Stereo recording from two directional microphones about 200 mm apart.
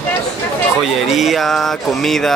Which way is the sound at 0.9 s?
Centre (ahead or behind).